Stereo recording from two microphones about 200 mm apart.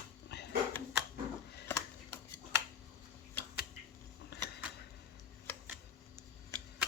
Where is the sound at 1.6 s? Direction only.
15° left (ahead or behind).